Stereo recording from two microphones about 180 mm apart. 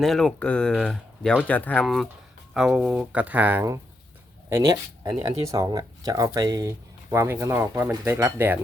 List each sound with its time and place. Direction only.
0.0 s speech: centre (ahead or behind)